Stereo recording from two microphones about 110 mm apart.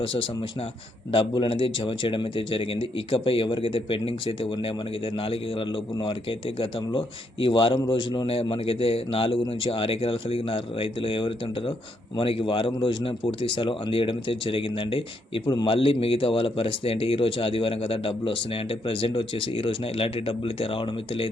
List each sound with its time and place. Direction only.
1.3 s speech: 50° left (ahead or behind)
8.4 s speech: 55° left (ahead or behind)